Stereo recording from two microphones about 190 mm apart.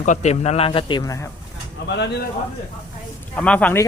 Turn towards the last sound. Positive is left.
turn(degrees=5)  # may be behind; listen again after turning